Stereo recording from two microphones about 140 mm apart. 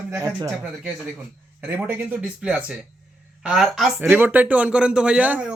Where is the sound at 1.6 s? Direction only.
10° right (ahead or behind).